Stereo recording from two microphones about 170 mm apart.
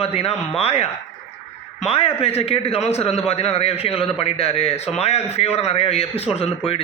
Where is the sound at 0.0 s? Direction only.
35° left (ahead or behind).